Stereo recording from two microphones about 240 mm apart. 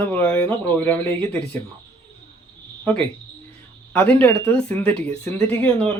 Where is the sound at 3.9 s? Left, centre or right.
Centre.